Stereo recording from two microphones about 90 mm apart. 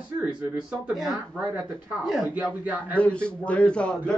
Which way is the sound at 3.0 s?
10° left (ahead or behind).